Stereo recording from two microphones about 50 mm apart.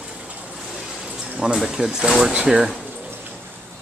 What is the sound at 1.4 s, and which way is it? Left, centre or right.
Speech, centre.